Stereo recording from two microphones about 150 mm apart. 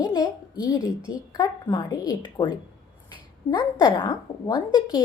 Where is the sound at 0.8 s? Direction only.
5° right (ahead or behind).